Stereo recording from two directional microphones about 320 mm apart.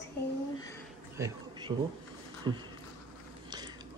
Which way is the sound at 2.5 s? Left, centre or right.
Centre.